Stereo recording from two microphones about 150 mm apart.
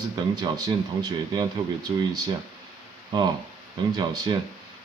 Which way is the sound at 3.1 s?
30° right (ahead or behind).